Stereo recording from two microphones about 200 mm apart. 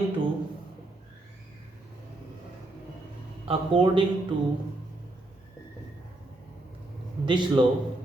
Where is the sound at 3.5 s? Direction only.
25° right (ahead or behind).